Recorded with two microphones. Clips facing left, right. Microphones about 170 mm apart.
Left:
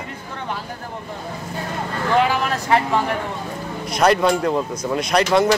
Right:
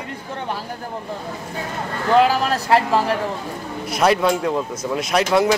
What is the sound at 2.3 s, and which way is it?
Speech, 35° right (ahead or behind).